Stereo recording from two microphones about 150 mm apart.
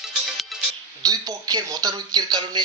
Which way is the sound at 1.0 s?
25° right (ahead or behind).